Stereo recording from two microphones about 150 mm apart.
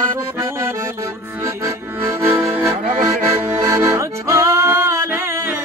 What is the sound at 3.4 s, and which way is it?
Music, 20° right (ahead or behind).